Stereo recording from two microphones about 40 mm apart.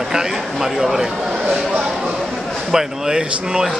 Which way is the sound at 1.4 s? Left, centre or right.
Right.